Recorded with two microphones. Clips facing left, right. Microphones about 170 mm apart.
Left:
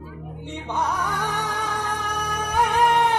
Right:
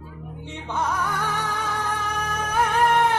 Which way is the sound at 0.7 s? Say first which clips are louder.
Even; 15° left (ahead or behind).